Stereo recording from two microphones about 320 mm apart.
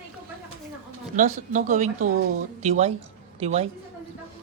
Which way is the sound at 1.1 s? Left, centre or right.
Right.